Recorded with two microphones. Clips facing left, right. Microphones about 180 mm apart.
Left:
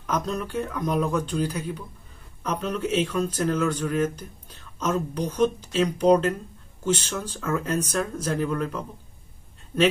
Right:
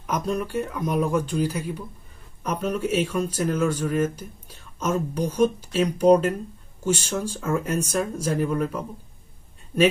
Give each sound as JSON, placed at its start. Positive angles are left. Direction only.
{"t": 0.0, "sound": "speech", "side_deg": -10}